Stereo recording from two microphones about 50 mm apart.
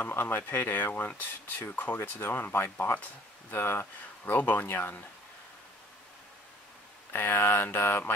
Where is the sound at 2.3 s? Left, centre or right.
Left.